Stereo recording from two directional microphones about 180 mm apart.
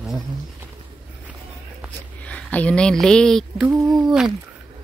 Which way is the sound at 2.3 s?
10° left (ahead or behind).